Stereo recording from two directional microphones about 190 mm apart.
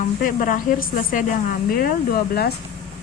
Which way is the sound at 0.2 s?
45° left (ahead or behind).